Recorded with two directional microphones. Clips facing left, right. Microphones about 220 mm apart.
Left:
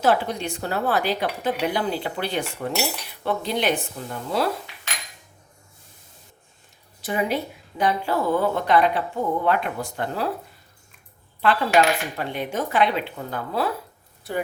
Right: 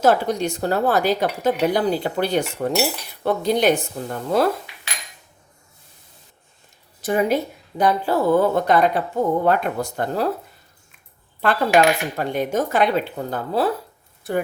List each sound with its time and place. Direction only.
0.0 s speech: 45° right (ahead or behind)
7.0 s speech: 45° right (ahead or behind)
11.3 s speech: 45° right (ahead or behind)